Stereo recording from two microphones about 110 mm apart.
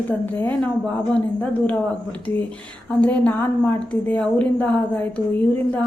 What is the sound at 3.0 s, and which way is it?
A woman's voice, 15° left (ahead or behind).